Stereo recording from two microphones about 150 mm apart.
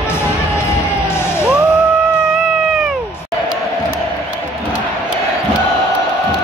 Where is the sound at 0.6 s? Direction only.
15° left (ahead or behind).